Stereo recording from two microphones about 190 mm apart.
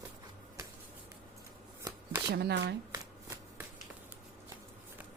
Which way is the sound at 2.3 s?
60° right (ahead or behind).